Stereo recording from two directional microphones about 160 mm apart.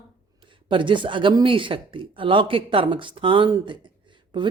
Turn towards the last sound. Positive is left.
turn(degrees=-30)  # may be behind; listen again after turning